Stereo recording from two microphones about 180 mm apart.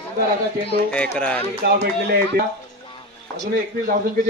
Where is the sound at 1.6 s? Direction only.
65° right (ahead or behind).